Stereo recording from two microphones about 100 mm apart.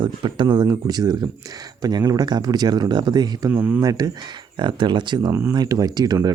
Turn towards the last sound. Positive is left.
turn(degrees=-40)  # may be behind; listen again after turning